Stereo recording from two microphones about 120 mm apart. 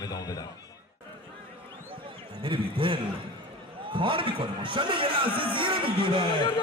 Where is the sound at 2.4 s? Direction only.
45° right (ahead or behind).